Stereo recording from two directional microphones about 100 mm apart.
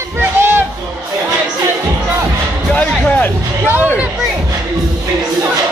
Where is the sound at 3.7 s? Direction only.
15° right (ahead or behind).